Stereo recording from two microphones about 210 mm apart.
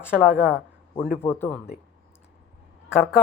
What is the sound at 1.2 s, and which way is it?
Speech, 10° left (ahead or behind).